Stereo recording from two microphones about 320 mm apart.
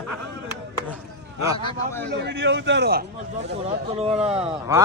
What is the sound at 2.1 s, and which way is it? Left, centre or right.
Speech, right.